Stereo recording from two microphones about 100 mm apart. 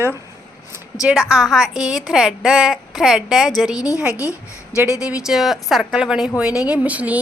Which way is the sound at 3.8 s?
35° left (ahead or behind).